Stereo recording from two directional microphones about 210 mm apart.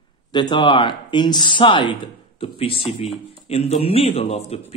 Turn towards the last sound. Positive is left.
turn(degrees=30)  # may be behind; listen again after turning